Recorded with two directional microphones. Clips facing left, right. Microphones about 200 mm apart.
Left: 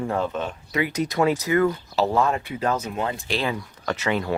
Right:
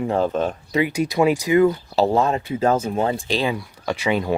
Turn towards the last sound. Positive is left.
turn(degrees=-15)  # may be behind; listen again after turning